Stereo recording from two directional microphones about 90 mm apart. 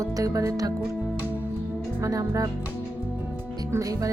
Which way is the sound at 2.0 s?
40° right (ahead or behind).